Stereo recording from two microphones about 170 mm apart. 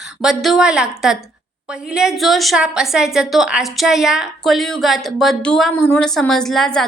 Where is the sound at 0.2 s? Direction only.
Centre (ahead or behind).